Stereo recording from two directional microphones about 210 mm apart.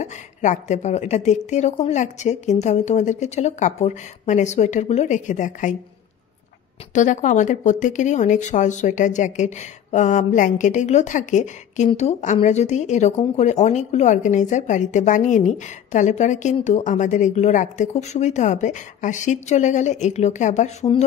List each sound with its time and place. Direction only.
0.0 s speech: 35° left (ahead or behind)
6.9 s speech: 35° left (ahead or behind)